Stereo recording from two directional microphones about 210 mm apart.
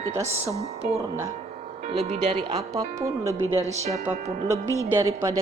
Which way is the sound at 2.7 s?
15° right (ahead or behind).